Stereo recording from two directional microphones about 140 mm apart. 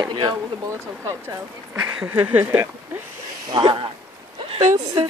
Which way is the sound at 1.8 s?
10° right (ahead or behind).